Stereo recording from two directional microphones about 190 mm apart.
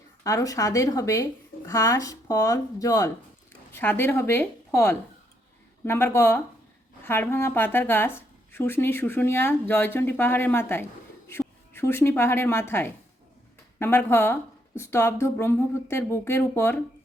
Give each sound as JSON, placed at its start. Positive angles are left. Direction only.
{"t": 0.3, "sound": "a woman's voice", "side_deg": 15}